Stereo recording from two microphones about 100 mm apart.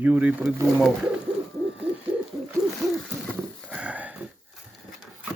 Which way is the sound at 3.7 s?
10° right (ahead or behind).